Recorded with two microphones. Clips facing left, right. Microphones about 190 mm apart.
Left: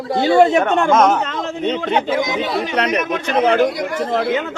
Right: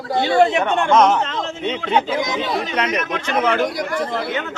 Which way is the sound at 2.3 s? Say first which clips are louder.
Left 2 dB; 30° left (ahead or behind).